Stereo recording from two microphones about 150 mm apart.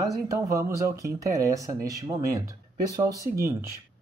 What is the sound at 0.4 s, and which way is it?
Speech, 20° right (ahead or behind).